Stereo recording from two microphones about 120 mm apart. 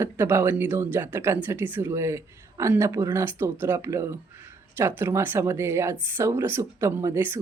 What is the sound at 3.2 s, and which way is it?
A woman's voice, 20° right (ahead or behind).